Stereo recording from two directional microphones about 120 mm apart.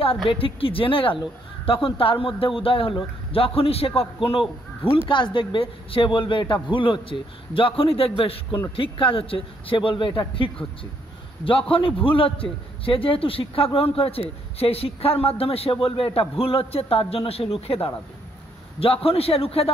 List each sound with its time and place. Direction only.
0.3 s a man's voice: 50° left (ahead or behind)